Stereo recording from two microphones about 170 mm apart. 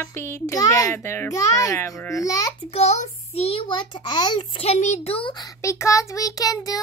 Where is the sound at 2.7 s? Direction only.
40° left (ahead or behind).